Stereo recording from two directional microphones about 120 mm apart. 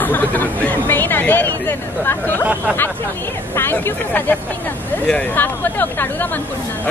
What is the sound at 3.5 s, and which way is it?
Speech, 20° left (ahead or behind).